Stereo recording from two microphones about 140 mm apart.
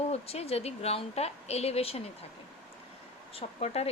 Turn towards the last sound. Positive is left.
turn(degrees=50)  # may be behind; listen again after turning